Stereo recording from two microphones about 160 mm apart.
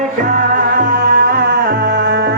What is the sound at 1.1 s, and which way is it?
Music, 90° right.